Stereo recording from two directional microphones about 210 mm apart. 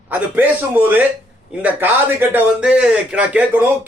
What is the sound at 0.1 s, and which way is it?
Speech, 10° right (ahead or behind).